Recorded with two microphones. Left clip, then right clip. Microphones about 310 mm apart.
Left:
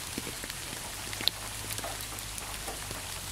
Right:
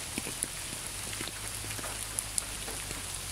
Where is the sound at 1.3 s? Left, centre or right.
Left.